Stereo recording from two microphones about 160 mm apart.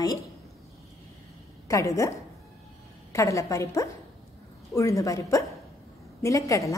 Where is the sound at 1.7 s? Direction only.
20° left (ahead or behind).